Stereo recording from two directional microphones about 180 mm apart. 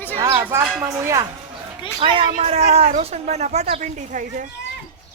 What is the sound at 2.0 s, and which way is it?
Speech, 25° right (ahead or behind).